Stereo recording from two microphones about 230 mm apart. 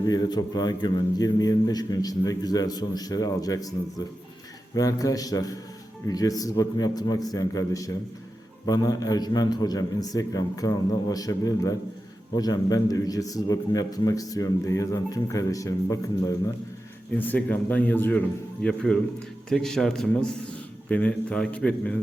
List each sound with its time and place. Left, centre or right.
0.0 s a man's voice: centre